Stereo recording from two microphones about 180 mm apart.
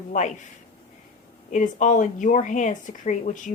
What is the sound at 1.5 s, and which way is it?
A woman's voice, 45° left (ahead or behind).